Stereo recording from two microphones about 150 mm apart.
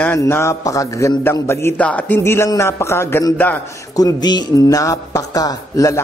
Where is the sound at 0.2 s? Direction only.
20° left (ahead or behind).